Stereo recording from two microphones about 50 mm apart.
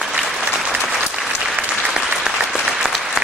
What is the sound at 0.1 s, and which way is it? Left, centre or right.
Applause, centre.